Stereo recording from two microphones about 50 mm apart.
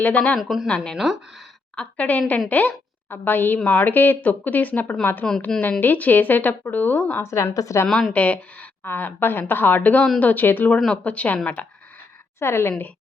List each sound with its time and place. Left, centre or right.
0.0 s a woman's voice: left
0.3 s speech: centre
1.7 s a woman's voice: left
3.6 s speech: left
3.8 s a woman's voice: left
5.2 s a woman's voice: centre
5.8 s a woman's voice: left
7.2 s a woman's voice: left
8.1 s speech: left
8.8 s a woman's voice: left
10.8 s a woman's voice: left
12.4 s a woman's voice: left